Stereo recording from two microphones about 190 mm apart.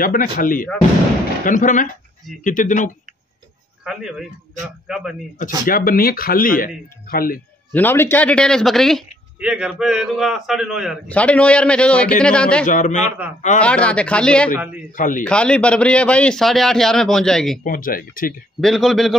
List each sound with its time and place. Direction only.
0.0 s speech: 45° left (ahead or behind)
3.8 s a man's voice: 5° right (ahead or behind)
5.7 s speech: 50° left (ahead or behind)
7.7 s a man's voice: 10° left (ahead or behind)
12.6 s a man's voice: 40° left (ahead or behind)
13.6 s speech: 5° left (ahead or behind)
14.9 s speech: 45° left (ahead or behind)
15.2 s a man's voice: 5° left (ahead or behind)
17.6 s speech: 50° left (ahead or behind)
18.6 s a man's voice: centre (ahead or behind)